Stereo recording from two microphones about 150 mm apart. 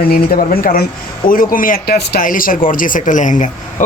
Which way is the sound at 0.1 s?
80° left.